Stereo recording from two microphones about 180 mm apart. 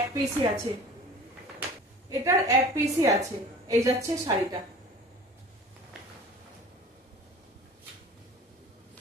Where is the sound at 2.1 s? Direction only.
20° right (ahead or behind).